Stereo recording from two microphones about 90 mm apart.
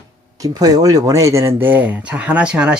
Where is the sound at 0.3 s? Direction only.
40° right (ahead or behind).